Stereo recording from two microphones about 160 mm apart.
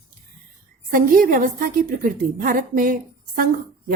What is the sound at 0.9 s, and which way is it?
A woman's voice, 60° right (ahead or behind).